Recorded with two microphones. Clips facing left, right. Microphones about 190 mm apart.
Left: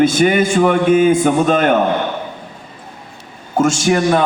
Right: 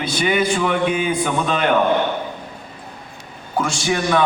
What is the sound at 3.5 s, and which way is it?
Speech, 45° left (ahead or behind).